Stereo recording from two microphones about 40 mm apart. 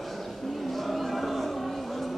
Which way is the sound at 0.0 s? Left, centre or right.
Centre.